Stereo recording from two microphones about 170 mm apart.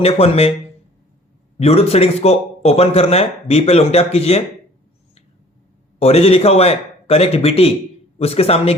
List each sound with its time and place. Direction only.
0.0 s speech: 35° left (ahead or behind)
1.5 s speech: 35° left (ahead or behind)
6.0 s speech: 35° left (ahead or behind)